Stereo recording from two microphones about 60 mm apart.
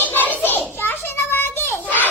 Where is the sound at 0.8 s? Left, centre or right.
Left.